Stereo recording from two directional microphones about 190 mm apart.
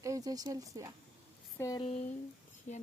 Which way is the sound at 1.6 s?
20° left (ahead or behind).